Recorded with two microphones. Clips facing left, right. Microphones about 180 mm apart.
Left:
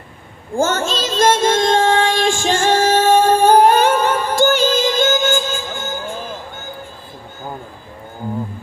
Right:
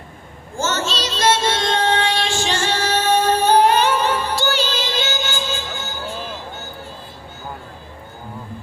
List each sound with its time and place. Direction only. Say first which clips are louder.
0.5 s child singing: left 5 dB; 50° left (ahead or behind)